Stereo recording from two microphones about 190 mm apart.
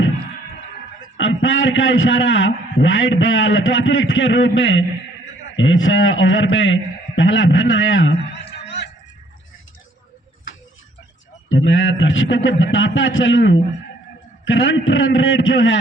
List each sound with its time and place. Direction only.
1.1 s a man's voice: 85° left; by 8.9 s 60° left (ahead or behind)
11.4 s a man's voice: 85° left